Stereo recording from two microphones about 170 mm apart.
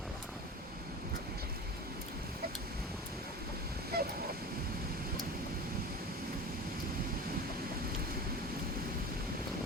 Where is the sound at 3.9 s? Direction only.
70° right (ahead or behind).